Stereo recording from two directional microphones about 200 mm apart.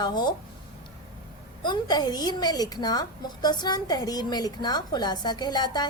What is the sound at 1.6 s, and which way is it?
A woman's voice, 20° left (ahead or behind).